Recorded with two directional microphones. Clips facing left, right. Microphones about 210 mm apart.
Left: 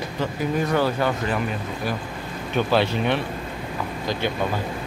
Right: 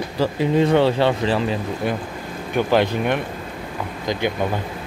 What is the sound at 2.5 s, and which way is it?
Speech, 15° right (ahead or behind).